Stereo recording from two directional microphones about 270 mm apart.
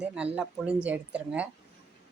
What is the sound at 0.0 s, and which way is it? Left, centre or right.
A woman's voice, centre.